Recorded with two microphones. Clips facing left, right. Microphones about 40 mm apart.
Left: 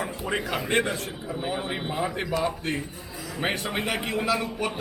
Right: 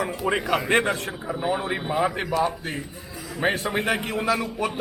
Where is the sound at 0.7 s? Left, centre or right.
Right.